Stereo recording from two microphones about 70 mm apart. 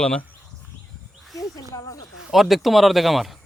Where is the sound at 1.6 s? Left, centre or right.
Left.